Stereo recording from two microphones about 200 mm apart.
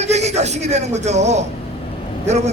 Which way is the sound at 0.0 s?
35° right (ahead or behind).